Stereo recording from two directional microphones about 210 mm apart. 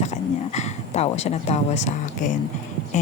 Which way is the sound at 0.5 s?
30° left (ahead or behind).